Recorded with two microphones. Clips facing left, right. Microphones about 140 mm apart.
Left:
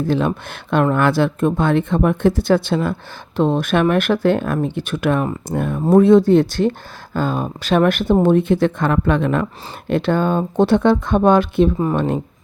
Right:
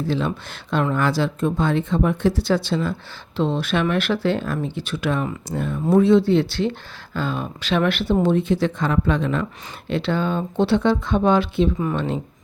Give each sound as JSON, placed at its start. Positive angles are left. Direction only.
{"t": 0.0, "sound": "speech", "side_deg": 50}
{"t": 11.8, "sound": "speech", "side_deg": 35}